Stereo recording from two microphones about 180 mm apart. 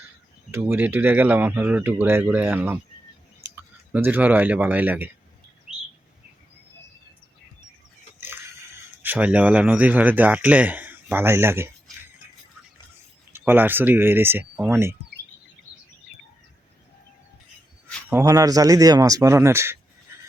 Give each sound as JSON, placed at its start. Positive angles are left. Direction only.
{"t": 0.5, "sound": "speech", "side_deg": -10}
{"t": 9.0, "sound": "speech", "side_deg": -10}
{"t": 13.3, "sound": "speech", "side_deg": -10}
{"t": 18.1, "sound": "speech", "side_deg": -20}